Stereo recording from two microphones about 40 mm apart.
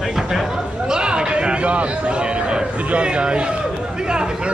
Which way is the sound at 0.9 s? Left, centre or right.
Right.